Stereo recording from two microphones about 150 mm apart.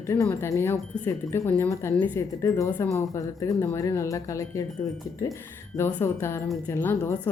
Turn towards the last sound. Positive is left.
turn(degrees=15)  # may be behind; listen again after turning